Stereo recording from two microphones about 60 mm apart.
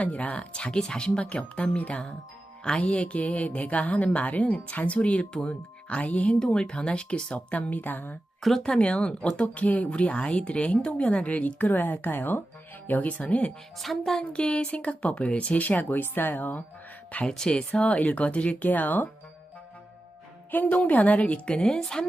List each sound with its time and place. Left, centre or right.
0.0 s speech: left
8.4 s speech: centre
8.6 s speech: centre
13.7 s speech: centre; by 16.6 s left
17.2 s speech: centre; by 19.0 s left
20.5 s speech: left; by 22.0 s centre